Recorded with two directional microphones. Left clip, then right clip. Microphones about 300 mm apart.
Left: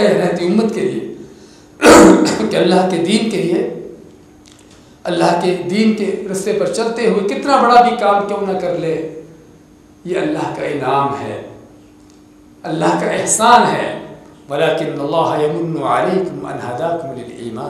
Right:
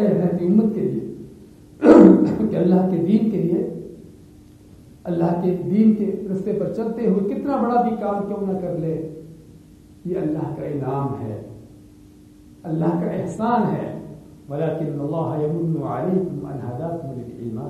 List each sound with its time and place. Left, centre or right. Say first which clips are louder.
0.0 s a man's voice: left 7 dB; centre
1.9 s a sound: left 5 dB; centre
2.1 s a man's voice: left 6 dB; centre
5.0 s a man's voice: left 8 dB; centre
12.6 s a man's voice: left 8 dB; centre